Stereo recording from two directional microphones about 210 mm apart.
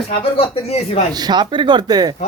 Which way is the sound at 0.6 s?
30° left (ahead or behind).